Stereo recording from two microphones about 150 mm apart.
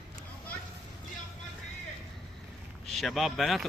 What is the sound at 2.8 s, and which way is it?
Speech, centre (ahead or behind).